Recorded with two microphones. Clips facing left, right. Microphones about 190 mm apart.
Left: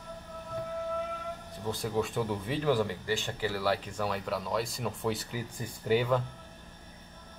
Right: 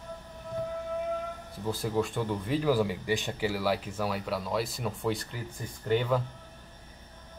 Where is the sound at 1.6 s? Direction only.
Centre (ahead or behind).